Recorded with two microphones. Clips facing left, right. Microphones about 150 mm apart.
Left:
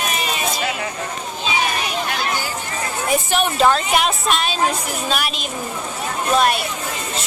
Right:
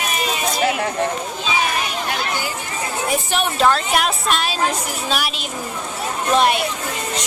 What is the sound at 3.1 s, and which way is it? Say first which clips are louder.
A woman's voice: left 4 dB; 5° left (ahead or behind).